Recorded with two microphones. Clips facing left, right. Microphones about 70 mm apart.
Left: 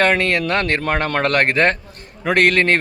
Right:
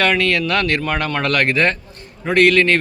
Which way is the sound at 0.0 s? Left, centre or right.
Left.